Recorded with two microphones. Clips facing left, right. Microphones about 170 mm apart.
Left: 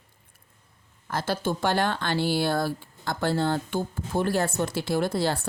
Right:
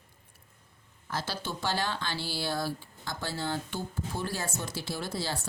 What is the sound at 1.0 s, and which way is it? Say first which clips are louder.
Speech: left 8 dB; 55° left (ahead or behind).